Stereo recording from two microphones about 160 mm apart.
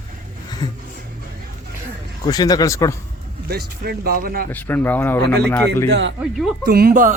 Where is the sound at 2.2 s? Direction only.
25° left (ahead or behind).